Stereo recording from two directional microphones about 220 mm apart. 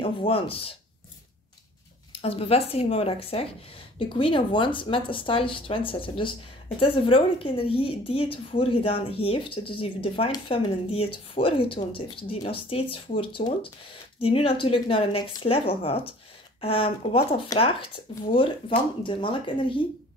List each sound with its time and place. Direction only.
0.2 s a woman's voice: 25° left (ahead or behind)
2.2 s a woman's voice: 25° left (ahead or behind)